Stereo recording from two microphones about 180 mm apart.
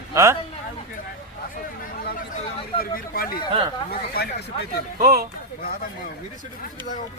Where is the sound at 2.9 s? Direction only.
55° left (ahead or behind).